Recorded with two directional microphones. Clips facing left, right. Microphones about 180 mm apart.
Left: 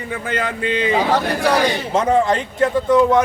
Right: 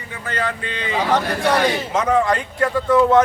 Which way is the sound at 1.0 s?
5° left (ahead or behind).